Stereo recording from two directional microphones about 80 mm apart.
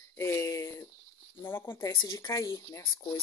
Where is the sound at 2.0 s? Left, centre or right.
Left.